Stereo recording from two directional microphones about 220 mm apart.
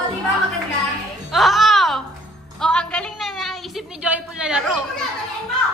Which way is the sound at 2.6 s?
5° left (ahead or behind).